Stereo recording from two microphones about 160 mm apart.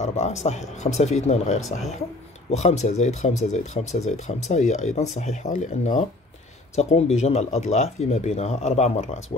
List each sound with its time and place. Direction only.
0.0 s speech: 45° left (ahead or behind)